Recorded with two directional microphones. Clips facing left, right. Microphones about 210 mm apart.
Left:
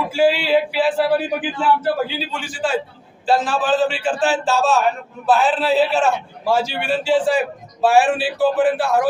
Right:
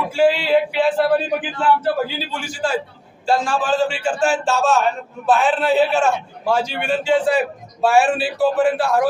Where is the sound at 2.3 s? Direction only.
Centre (ahead or behind).